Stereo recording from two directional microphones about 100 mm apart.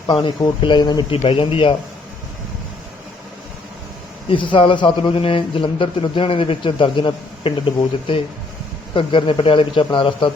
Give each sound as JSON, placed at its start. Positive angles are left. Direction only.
{"t": 0.1, "sound": "speech", "side_deg": 55}
{"t": 1.1, "sound": "a man's voice", "side_deg": 65}
{"t": 4.3, "sound": "a man's voice", "side_deg": 55}
{"t": 9.0, "sound": "a man's voice", "side_deg": 60}